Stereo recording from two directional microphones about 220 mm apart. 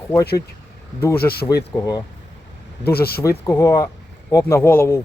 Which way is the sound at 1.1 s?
45° left (ahead or behind).